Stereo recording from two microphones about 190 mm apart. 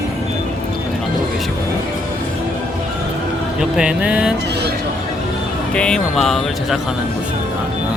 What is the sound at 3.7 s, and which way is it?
Speech, 5° right (ahead or behind).